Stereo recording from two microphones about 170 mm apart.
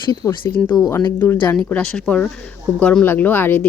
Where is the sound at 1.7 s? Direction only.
5° left (ahead or behind).